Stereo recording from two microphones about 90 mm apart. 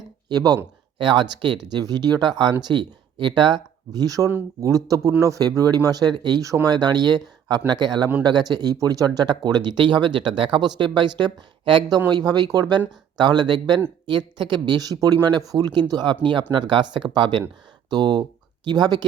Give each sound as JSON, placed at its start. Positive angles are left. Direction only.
{"t": 0.3, "sound": "speech", "side_deg": -45}
{"t": 0.9, "sound": "speech", "side_deg": -60}
{"t": 1.7, "sound": "speech", "side_deg": -50}
{"t": 11.9, "sound": "speech", "side_deg": -50}